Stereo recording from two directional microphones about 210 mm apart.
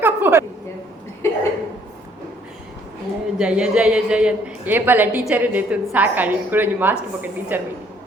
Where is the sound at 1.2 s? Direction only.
10° left (ahead or behind).